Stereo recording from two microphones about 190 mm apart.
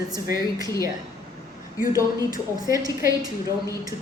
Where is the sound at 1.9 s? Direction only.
20° right (ahead or behind).